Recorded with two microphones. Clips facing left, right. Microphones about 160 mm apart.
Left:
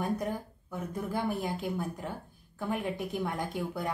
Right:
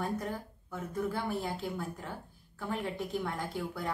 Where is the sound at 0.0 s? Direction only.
15° left (ahead or behind).